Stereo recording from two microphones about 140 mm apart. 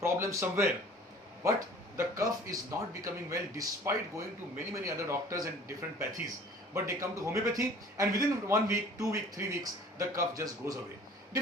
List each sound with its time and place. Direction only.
0.0 s speech: 20° right (ahead or behind)